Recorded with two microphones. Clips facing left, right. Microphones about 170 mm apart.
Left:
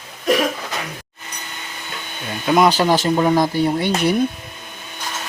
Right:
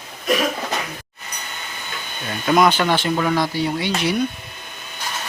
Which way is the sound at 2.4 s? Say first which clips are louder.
Left 1 dB; 15° left (ahead or behind).